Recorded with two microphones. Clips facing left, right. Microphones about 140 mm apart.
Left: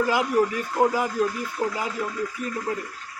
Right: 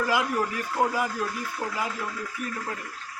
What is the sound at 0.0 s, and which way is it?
A man's voice, 20° left (ahead or behind).